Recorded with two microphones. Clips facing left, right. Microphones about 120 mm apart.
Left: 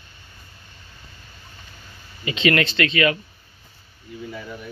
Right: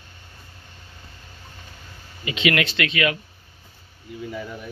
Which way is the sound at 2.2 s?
5° right (ahead or behind).